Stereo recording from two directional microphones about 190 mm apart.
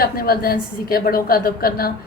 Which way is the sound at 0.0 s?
50° left (ahead or behind).